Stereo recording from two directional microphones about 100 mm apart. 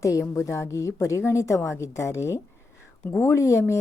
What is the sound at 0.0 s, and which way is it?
A woman's voice, 30° left (ahead or behind).